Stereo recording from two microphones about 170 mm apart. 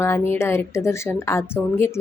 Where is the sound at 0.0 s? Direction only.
15° left (ahead or behind).